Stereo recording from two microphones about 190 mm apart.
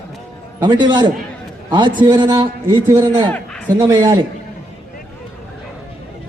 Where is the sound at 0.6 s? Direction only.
25° right (ahead or behind).